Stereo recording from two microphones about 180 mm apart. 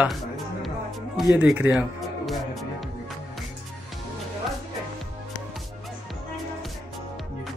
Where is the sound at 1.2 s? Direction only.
10° right (ahead or behind).